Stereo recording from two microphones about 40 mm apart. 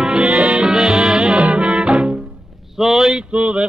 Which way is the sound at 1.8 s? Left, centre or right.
Right.